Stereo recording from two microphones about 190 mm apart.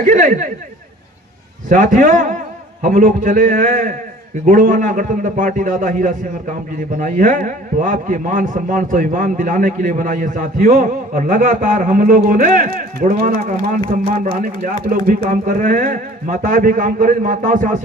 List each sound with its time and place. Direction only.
0.0 s a man's voice: 45° right (ahead or behind)
1.7 s a man's voice: 45° right (ahead or behind)